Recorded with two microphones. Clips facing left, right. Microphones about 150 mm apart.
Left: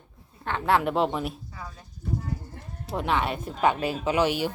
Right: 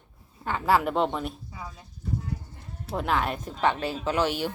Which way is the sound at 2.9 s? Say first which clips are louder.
Left 1 dB; centre (ahead or behind).